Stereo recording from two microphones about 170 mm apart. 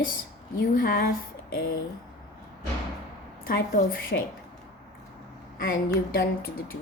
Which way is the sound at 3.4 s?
60° left (ahead or behind).